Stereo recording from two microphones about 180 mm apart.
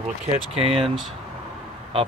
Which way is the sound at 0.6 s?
35° right (ahead or behind).